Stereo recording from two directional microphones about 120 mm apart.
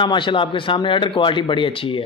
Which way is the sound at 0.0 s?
40° left (ahead or behind).